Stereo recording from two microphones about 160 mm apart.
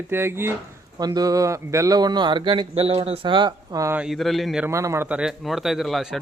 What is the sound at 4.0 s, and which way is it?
Speech, centre (ahead or behind).